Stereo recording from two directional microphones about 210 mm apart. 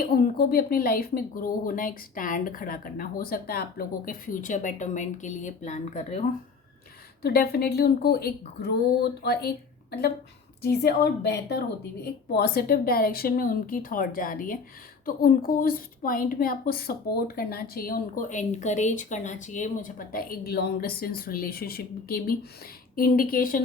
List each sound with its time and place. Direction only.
0.0 s a woman's voice: 45° left (ahead or behind)
7.2 s a woman's voice: 50° left (ahead or behind)
10.6 s a woman's voice: 50° left (ahead or behind)